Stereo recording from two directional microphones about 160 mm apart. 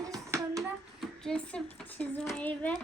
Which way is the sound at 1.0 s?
5° left (ahead or behind).